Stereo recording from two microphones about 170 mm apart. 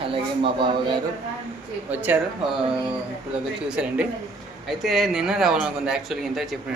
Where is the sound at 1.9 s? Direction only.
10° right (ahead or behind).